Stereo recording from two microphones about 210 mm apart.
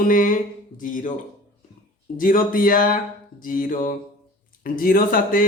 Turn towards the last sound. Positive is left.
turn(degrees=45)  # may be behind; listen again after turning